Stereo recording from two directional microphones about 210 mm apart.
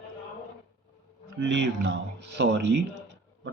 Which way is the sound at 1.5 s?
55° right (ahead or behind).